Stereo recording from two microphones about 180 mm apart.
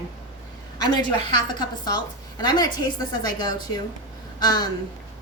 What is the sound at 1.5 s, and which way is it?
A woman's voice, 20° left (ahead or behind).